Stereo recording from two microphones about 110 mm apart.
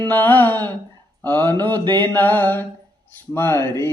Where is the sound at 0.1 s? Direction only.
15° left (ahead or behind).